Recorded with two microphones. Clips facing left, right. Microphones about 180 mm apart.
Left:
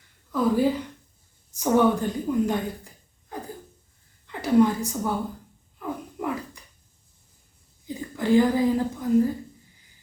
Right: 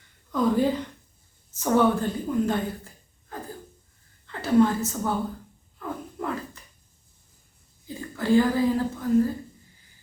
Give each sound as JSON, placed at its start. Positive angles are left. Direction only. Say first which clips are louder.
{"t": 0.3, "sound": "a woman's voice", "louder": "left 1 dB", "side_deg": 5}
{"t": 5.8, "sound": "a sound", "louder": "left 1 dB", "side_deg": 15}
{"t": 7.9, "sound": "speech", "louder": "left 1 dB", "side_deg": 15}